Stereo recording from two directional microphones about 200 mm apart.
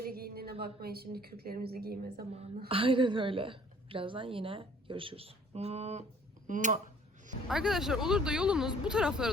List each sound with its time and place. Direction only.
0.1 s a sound: 50° right (ahead or behind)
0.6 s a woman's voice: 50° right (ahead or behind)
2.6 s a woman's voice: 25° right (ahead or behind)
7.4 s speech: centre (ahead or behind)